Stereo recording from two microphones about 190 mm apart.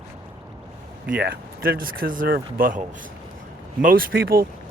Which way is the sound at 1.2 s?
55° right (ahead or behind).